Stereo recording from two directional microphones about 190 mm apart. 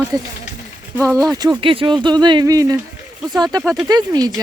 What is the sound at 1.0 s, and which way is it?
Speech, 5° left (ahead or behind).